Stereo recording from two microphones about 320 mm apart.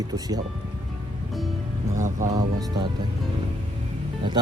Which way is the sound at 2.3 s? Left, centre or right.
Centre.